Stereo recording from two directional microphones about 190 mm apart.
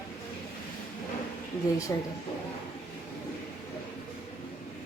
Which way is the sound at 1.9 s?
15° left (ahead or behind).